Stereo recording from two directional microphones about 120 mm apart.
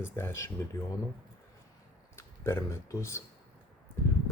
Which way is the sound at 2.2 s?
20° left (ahead or behind).